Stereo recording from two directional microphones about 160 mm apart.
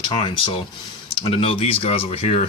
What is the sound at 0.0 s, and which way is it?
Speech, 30° left (ahead or behind).